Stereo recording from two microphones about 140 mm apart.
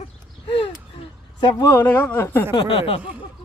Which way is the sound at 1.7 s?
15° left (ahead or behind).